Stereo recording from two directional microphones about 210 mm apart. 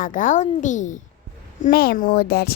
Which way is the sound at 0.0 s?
40° left (ahead or behind).